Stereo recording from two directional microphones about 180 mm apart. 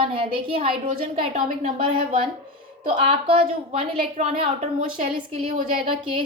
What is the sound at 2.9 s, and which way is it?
A woman's voice, 30° right (ahead or behind).